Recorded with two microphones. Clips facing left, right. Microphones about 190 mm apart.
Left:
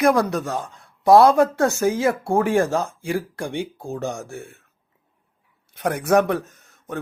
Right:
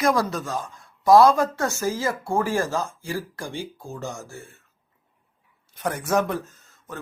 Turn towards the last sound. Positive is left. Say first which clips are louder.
# left 4 dB
turn(degrees=65)  # may be behind; listen again after turning